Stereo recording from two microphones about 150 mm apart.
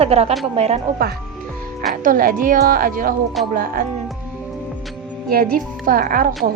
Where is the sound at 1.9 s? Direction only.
65° right (ahead or behind).